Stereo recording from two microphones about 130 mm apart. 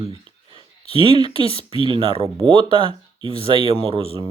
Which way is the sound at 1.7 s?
40° right (ahead or behind).